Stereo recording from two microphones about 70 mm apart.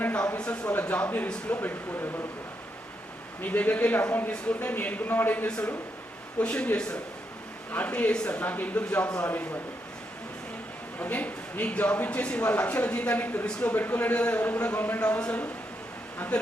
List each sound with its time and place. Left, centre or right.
0.0 s speech: centre
3.4 s speech: left
6.4 s speech: centre
11.0 s speech: left